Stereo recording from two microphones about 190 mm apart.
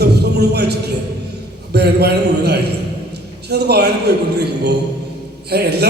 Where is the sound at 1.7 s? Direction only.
60° right (ahead or behind).